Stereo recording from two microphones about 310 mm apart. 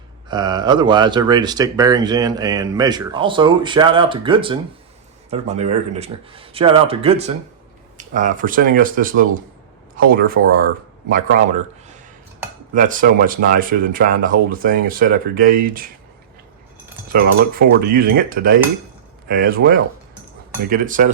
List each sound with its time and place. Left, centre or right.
0.3 s speech: centre
12.7 s speech: right
17.1 s speech: right